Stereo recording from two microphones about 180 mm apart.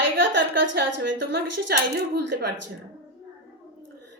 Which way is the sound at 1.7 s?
60° right (ahead or behind).